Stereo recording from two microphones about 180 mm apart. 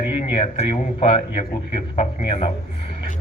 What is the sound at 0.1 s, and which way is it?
A man's voice, 35° left (ahead or behind).